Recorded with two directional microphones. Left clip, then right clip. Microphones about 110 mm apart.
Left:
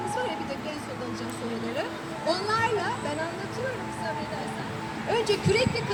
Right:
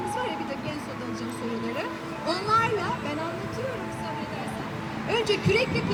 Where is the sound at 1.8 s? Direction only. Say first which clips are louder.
Even; 15° left (ahead or behind).